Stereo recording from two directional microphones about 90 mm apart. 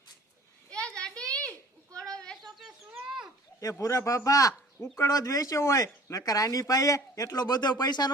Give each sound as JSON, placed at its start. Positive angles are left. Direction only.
{"t": 0.7, "sound": "a sound", "side_deg": 10}
{"t": 2.2, "sound": "bird", "side_deg": 5}
{"t": 3.6, "sound": "speech", "side_deg": 35}